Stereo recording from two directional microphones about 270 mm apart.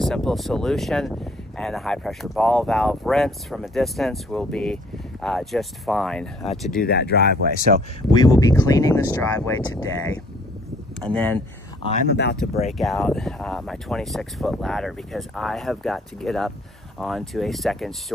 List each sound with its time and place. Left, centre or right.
0.0 s speech: centre
6.8 s speech: left
8.1 s speech: centre
11.0 s speech: centre
12.1 s speech: left
12.7 s speech: centre